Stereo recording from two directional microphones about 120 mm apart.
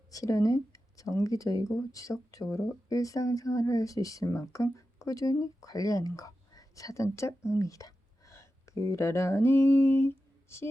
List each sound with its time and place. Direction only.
0.1 s speech: 30° left (ahead or behind)